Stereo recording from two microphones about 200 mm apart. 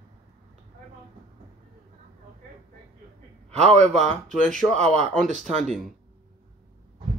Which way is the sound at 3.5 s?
35° right (ahead or behind).